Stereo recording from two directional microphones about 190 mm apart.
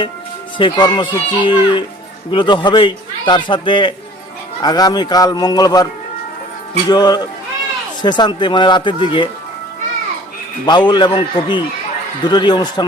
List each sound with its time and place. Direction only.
0.6 s a man's voice: 25° left (ahead or behind)
10.7 s a man's voice: 25° left (ahead or behind)